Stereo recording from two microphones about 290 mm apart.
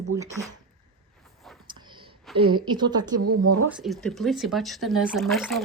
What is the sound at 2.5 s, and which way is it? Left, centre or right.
Speech, centre.